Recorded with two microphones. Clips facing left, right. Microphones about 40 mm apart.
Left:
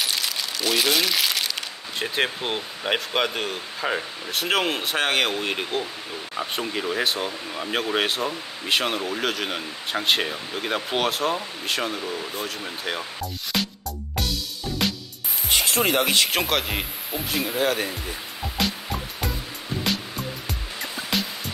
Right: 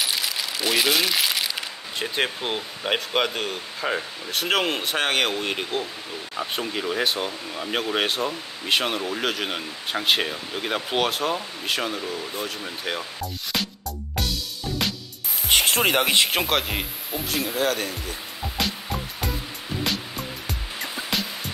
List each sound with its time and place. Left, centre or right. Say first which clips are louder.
0.0 s coin: even; centre
6.3 s speech: even; centre
15.4 s music: right 2 dB; right
16.0 s speech: right 1 dB; centre
16.3 s speech: even; centre
18.4 s music: left 1 dB; centre